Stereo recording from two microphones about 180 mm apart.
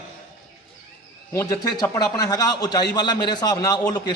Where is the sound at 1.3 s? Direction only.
20° left (ahead or behind).